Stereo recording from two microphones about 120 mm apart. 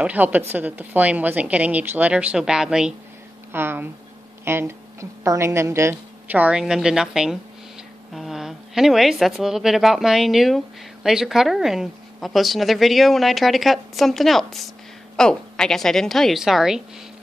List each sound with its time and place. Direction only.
0.0 s a woman's voice: 15° right (ahead or behind)
3.5 s a woman's voice: 20° right (ahead or behind); by 16.8 s 5° right (ahead or behind)